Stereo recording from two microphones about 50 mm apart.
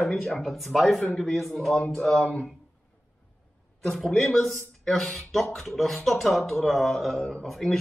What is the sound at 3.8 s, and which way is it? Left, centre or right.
A man's voice, centre.